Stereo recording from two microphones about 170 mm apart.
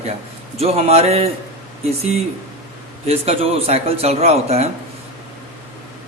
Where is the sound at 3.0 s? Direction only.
35° right (ahead or behind).